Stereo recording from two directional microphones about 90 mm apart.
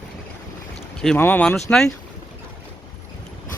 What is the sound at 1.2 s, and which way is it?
Speech, 20° left (ahead or behind).